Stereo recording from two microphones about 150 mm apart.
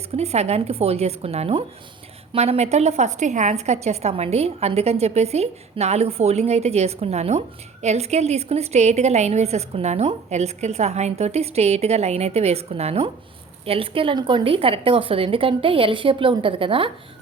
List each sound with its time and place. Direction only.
0.1 s a woman's voice: 45° right (ahead or behind)